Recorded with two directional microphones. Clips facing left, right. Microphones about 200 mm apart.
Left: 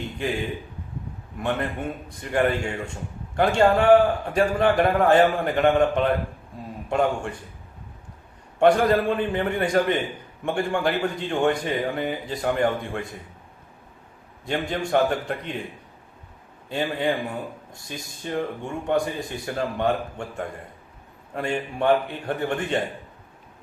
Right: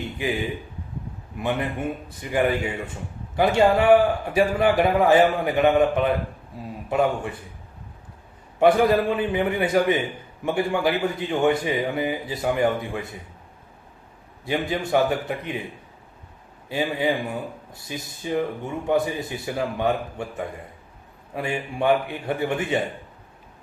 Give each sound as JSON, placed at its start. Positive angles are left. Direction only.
{"t": 1.4, "sound": "a man's voice", "side_deg": -5}
{"t": 8.5, "sound": "a man's voice", "side_deg": -5}
{"t": 14.4, "sound": "a man's voice", "side_deg": -5}
{"t": 16.6, "sound": "a man's voice", "side_deg": -5}